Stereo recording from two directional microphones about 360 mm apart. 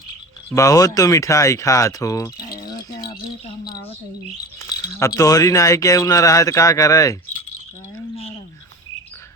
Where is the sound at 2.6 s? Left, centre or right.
Centre.